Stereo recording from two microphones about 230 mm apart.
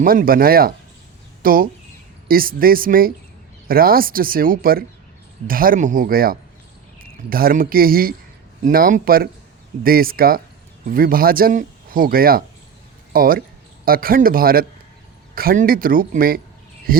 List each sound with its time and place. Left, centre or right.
0.0 s speech: right